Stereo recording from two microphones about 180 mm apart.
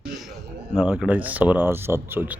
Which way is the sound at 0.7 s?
5° right (ahead or behind).